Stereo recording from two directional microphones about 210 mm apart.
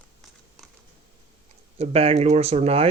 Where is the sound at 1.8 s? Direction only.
30° right (ahead or behind).